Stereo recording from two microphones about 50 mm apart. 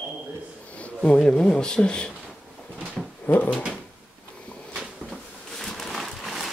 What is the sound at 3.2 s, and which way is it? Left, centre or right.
Speech, left.